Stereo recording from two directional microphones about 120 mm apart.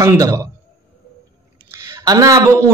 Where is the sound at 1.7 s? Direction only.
25° right (ahead or behind).